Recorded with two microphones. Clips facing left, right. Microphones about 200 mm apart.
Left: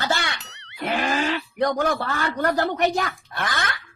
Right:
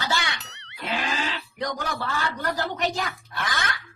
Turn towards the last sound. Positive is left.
turn(degrees=55)  # may be behind; listen again after turning